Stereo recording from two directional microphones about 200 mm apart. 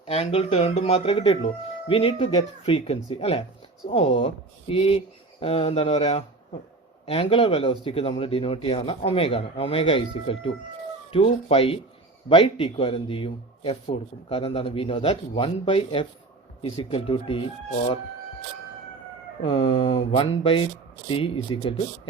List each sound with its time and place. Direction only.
0.1 s speech: 30° left (ahead or behind)
19.4 s speech: 25° left (ahead or behind)